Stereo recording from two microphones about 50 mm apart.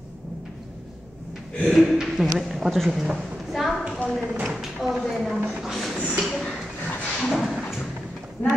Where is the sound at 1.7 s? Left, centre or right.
Centre.